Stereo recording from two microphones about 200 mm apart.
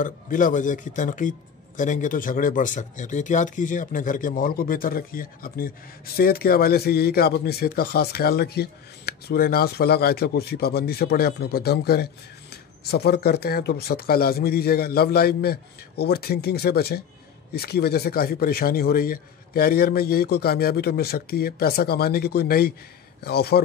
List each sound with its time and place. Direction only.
0.0 s a man's voice: 40° left (ahead or behind)